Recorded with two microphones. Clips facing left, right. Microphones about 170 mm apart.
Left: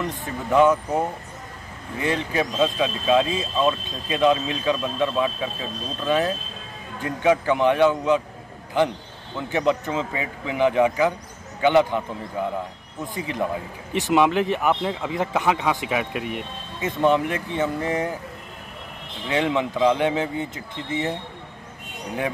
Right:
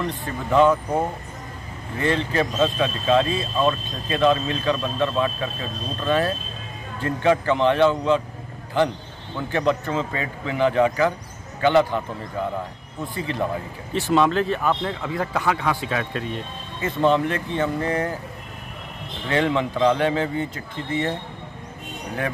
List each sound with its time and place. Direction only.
0.2 s speech: 15° left (ahead or behind)
2.0 s speech: 10° left (ahead or behind)
9.5 s speech: 15° left (ahead or behind)
19.2 s speech: 15° left (ahead or behind)